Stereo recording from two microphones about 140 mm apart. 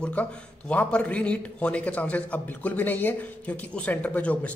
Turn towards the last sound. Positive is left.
turn(degrees=10)  # may be behind; listen again after turning